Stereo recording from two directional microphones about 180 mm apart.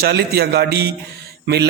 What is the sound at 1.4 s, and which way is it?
Speech, 65° right (ahead or behind).